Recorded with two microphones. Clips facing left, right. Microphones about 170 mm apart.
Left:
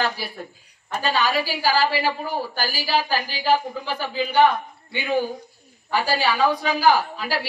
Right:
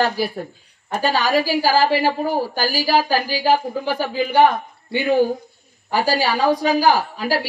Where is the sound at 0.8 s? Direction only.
45° right (ahead or behind).